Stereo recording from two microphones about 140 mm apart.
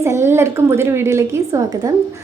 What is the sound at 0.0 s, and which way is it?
A woman's voice, 20° right (ahead or behind).